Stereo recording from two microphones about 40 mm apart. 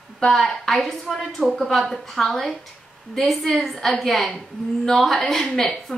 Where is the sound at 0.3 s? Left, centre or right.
Centre.